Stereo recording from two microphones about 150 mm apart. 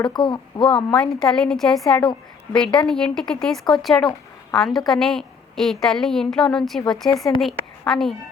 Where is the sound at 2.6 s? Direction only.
5° left (ahead or behind).